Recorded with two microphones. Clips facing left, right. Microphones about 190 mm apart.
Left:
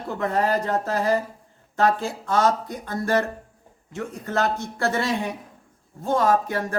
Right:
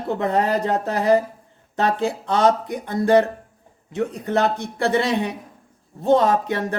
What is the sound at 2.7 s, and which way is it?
Speech, 15° right (ahead or behind).